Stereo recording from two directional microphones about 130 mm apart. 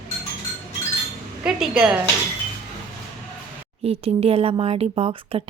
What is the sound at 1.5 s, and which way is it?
Speech, 5° right (ahead or behind).